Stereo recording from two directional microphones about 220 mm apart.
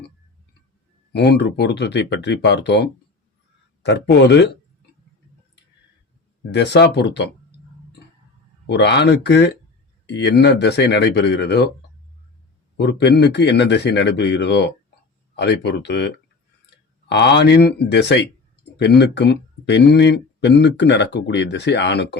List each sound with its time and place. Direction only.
1.1 s speech: 50° left (ahead or behind)
3.8 s speech: 50° left (ahead or behind)
6.5 s speech: 50° left (ahead or behind)
8.6 s speech: 50° left (ahead or behind)
12.7 s speech: 50° left (ahead or behind)